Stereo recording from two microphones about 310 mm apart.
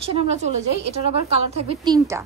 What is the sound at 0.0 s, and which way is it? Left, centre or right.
A woman's voice, centre.